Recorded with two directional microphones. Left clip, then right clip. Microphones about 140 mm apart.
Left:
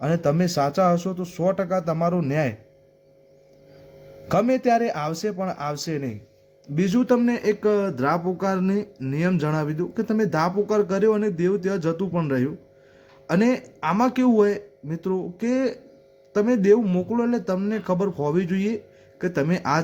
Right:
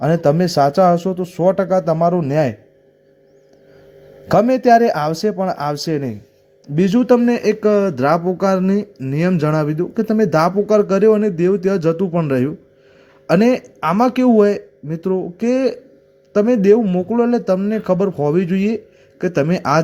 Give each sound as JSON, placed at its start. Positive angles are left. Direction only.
{"t": 0.0, "sound": "speech", "side_deg": -35}
{"t": 4.3, "sound": "speech", "side_deg": -35}